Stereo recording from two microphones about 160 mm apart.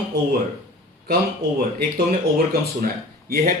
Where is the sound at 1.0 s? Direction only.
70° right (ahead or behind).